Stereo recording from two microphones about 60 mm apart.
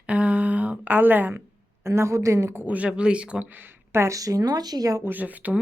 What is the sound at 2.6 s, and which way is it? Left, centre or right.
Speech, right.